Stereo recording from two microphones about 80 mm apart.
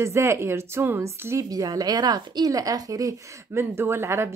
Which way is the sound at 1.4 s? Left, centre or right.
Right.